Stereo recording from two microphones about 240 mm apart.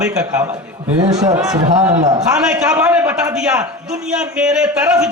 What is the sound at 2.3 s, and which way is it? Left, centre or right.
A man's voice, centre.